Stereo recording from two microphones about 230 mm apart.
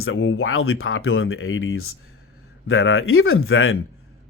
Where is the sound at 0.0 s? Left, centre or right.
Left.